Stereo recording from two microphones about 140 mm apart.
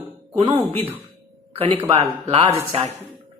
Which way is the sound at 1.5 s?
40° right (ahead or behind).